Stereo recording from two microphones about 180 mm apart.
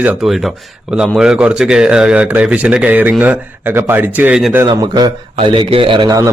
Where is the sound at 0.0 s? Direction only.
5° right (ahead or behind).